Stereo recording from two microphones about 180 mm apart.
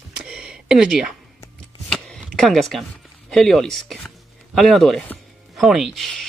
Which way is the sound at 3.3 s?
Centre (ahead or behind).